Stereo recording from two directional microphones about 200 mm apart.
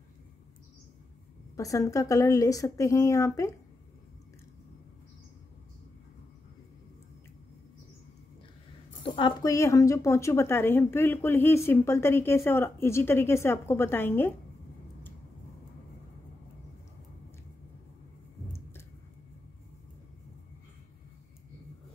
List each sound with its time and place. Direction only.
1.6 s a woman's voice: 15° left (ahead or behind)
9.0 s a woman's voice: 25° left (ahead or behind)